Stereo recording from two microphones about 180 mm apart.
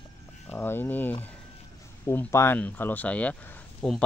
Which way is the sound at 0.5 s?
10° left (ahead or behind).